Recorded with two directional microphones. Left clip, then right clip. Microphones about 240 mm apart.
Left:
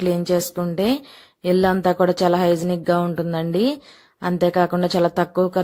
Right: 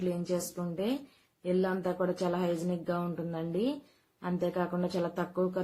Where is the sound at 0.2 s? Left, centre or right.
Left.